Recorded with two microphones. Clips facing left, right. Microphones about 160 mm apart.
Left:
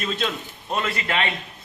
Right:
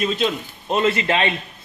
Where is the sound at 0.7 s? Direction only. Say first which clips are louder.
Right 7 dB; 25° right (ahead or behind).